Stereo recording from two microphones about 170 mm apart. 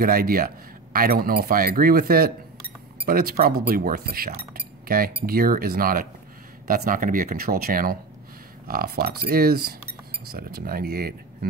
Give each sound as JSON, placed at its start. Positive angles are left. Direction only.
{"t": 0.0, "sound": "speech", "side_deg": -60}
{"t": 4.6, "sound": "chink", "side_deg": -60}
{"t": 5.2, "sound": "speech", "side_deg": -60}